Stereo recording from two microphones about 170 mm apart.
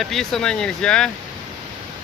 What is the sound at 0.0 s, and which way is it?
Speech, centre (ahead or behind).